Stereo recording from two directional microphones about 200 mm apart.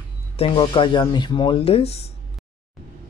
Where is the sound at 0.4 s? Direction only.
25° left (ahead or behind).